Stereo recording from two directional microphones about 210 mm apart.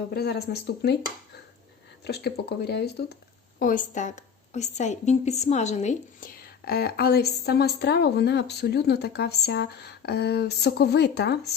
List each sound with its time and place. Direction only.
0.1 s a woman's voice: 50° left (ahead or behind)
2.0 s a woman's voice: 50° left (ahead or behind)
3.6 s a woman's voice: 40° left (ahead or behind)